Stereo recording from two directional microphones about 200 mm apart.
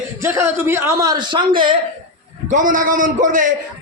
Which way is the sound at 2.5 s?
40° right (ahead or behind).